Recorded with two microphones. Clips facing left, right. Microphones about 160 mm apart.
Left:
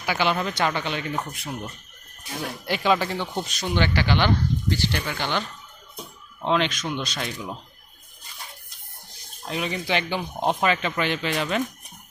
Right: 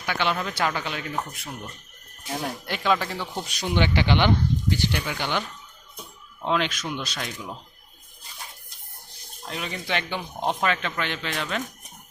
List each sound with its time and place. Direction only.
0.0 s speech: 5° left (ahead or behind)
3.4 s speech: 15° right (ahead or behind)
9.5 s speech: 5° left (ahead or behind)